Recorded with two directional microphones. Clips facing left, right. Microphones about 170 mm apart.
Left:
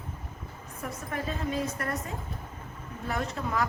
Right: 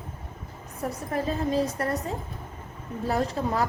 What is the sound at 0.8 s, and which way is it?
A woman's voice, 35° right (ahead or behind).